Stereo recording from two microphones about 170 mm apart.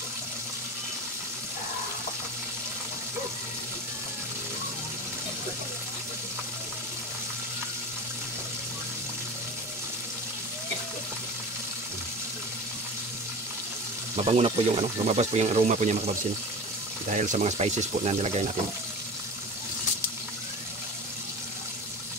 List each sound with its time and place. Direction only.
14.1 s speech: 35° right (ahead or behind)